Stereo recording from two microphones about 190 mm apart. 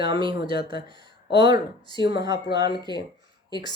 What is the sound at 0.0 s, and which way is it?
Speech, 25° right (ahead or behind).